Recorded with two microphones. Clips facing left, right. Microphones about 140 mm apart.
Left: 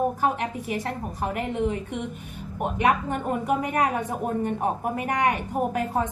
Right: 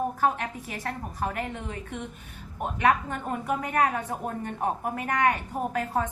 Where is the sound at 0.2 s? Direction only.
15° left (ahead or behind).